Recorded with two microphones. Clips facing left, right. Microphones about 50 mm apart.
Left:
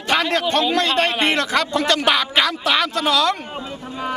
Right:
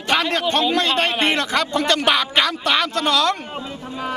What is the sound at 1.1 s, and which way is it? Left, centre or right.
Speech, centre.